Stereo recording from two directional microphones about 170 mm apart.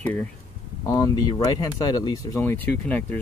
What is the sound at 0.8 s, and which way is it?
Speech, 20° left (ahead or behind).